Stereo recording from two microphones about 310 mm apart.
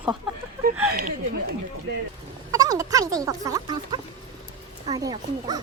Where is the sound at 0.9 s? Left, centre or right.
Right.